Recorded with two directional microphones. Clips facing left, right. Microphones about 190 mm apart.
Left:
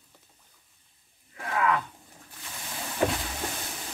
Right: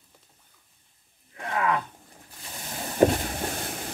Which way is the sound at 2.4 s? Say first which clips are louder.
Right 3 dB; 30° right (ahead or behind).